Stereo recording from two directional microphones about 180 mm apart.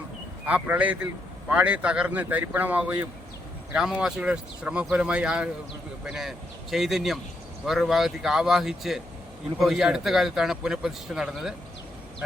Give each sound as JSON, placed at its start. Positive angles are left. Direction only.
{"t": 0.4, "sound": "a man's voice", "side_deg": -10}